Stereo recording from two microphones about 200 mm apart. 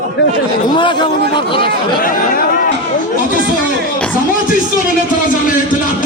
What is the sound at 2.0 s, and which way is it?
Speech, 45° left (ahead or behind).